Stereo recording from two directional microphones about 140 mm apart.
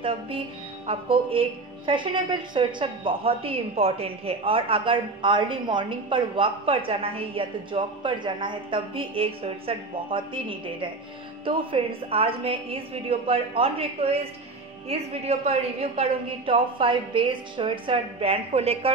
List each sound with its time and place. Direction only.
0.8 s a woman's voice: 40° right (ahead or behind)